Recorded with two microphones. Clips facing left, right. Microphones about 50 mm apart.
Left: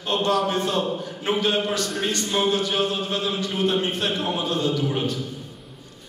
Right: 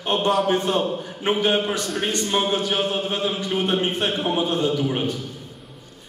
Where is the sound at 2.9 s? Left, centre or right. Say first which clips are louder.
Right 2 dB; right.